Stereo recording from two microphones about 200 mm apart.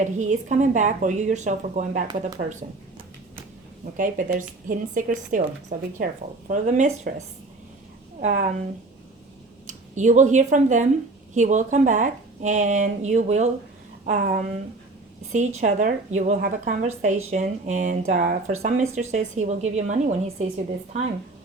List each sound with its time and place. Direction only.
0.0 s speech: 35° right (ahead or behind)
3.9 s speech: 40° right (ahead or behind)
8.2 s speech: 40° right (ahead or behind)
9.6 s speech: 40° right (ahead or behind)